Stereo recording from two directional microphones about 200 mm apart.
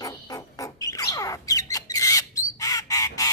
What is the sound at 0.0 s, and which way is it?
Music, 20° left (ahead or behind).